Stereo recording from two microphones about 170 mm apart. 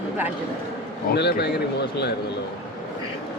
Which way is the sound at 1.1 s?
75° left (ahead or behind).